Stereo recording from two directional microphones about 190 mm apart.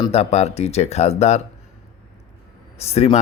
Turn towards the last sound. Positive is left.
turn(degrees=35)  # may be behind; listen again after turning